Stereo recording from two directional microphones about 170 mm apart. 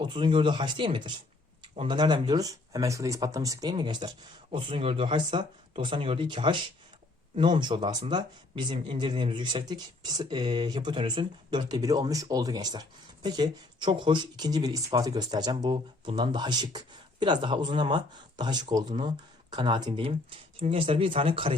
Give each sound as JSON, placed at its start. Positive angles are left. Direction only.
{"t": 0.0, "sound": "speech", "side_deg": -30}